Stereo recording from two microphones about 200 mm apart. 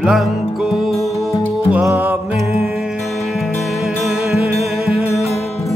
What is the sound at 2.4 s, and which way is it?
Music, 30° left (ahead or behind).